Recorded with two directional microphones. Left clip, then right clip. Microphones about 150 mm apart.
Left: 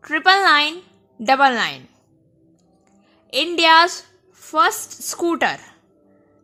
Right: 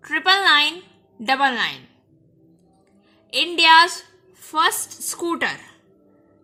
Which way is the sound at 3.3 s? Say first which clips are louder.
Even; 40° left (ahead or behind).